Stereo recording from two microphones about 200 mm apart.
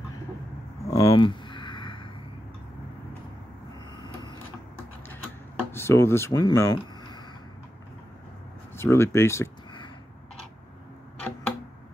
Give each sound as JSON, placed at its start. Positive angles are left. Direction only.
{"t": 0.8, "sound": "a sound", "side_deg": 20}
{"t": 3.9, "sound": "vehicle", "side_deg": 25}
{"t": 5.7, "sound": "speech", "side_deg": 10}
{"t": 8.7, "sound": "speech", "side_deg": 10}